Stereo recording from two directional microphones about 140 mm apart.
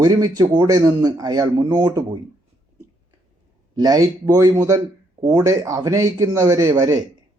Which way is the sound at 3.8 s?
30° right (ahead or behind).